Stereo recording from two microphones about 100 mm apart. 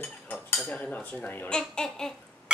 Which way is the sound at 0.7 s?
15° left (ahead or behind).